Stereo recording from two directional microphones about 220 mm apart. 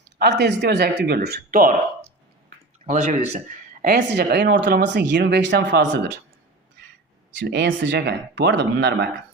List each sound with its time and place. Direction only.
0.0 s speech: 50° right (ahead or behind)
2.8 s speech: 35° right (ahead or behind); by 6.1 s 50° right (ahead or behind)
7.3 s speech: 50° right (ahead or behind)